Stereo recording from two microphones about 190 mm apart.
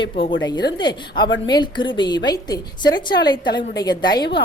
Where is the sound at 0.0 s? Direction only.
25° left (ahead or behind).